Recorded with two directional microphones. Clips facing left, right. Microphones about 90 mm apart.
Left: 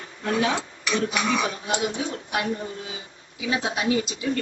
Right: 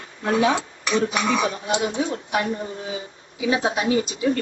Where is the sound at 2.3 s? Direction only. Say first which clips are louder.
Right 3 dB; 35° right (ahead or behind).